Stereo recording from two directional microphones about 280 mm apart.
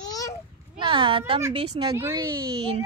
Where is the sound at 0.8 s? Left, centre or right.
Centre.